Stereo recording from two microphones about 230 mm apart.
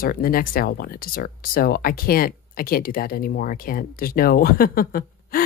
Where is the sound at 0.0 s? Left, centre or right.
Left.